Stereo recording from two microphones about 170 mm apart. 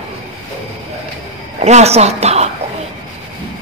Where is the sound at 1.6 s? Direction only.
40° right (ahead or behind).